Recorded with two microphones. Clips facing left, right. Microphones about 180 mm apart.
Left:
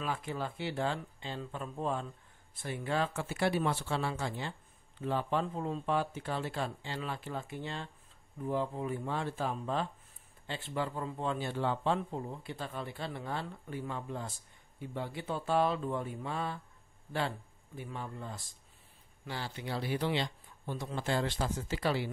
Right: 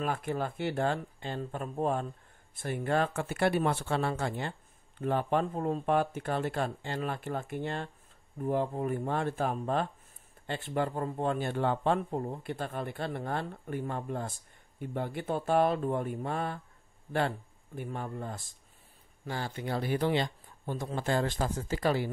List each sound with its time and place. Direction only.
0.0 s speech: 50° right (ahead or behind)
17.7 s speech: 50° right (ahead or behind)